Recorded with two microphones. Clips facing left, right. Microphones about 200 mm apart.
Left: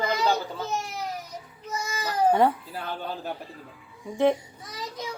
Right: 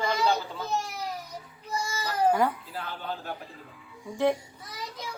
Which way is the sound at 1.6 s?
20° left (ahead or behind).